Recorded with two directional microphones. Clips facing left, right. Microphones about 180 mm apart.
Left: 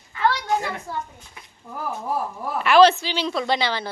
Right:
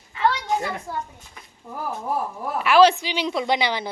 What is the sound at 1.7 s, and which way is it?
A woman's voice, centre (ahead or behind).